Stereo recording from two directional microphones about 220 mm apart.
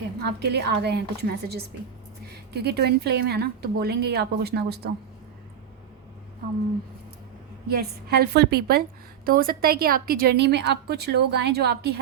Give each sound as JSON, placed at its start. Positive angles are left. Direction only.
{"t": 0.2, "sound": "a woman's voice", "side_deg": -50}
{"t": 7.7, "sound": "a woman's voice", "side_deg": -45}